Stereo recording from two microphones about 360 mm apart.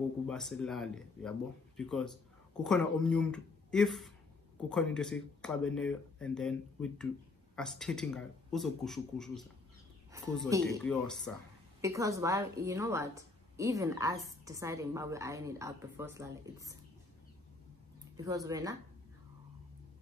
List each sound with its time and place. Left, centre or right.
0.3 s speech: centre
10.8 s speech: centre
11.8 s a woman's voice: centre
18.1 s a woman's voice: centre